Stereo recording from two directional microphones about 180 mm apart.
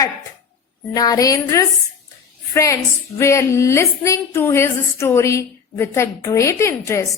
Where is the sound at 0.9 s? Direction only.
20° left (ahead or behind).